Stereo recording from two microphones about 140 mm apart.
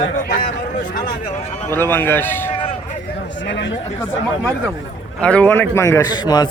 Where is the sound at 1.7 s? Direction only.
15° left (ahead or behind).